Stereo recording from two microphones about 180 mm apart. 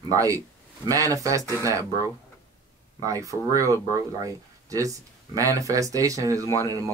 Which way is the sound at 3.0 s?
20° right (ahead or behind).